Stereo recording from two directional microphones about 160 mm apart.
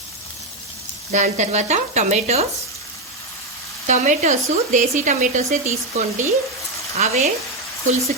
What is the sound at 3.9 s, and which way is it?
Speech, 45° right (ahead or behind).